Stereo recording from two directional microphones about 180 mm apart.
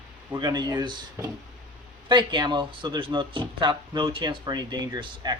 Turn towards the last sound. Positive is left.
turn(degrees=-25)  # may be behind; listen again after turning